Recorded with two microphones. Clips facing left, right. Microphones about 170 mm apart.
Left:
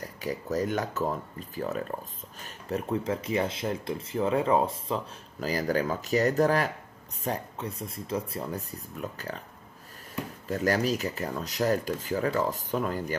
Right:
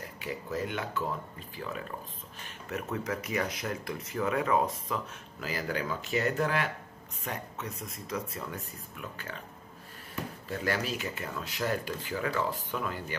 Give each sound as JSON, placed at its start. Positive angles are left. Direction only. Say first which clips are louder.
{"t": 0.2, "sound": "speech", "louder": "left 5 dB", "side_deg": 40}
{"t": 2.4, "sound": "speech", "louder": "left 5 dB", "side_deg": 30}
{"t": 10.5, "sound": "speech", "louder": "left 6 dB", "side_deg": 40}